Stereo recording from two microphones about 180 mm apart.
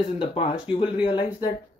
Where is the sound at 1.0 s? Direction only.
25° left (ahead or behind).